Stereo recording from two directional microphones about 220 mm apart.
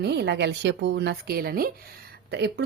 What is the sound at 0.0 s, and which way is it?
A woman's voice, 50° right (ahead or behind).